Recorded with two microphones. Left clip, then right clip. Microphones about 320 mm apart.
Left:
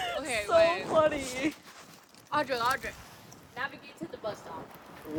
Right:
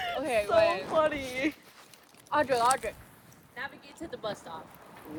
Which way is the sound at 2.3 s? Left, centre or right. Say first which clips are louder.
Right 3 dB; centre.